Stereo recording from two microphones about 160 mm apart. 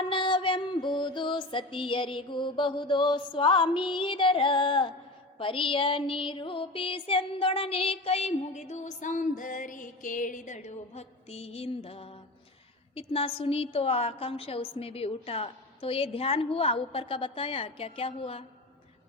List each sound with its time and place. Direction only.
0.1 s music: 30° left (ahead or behind)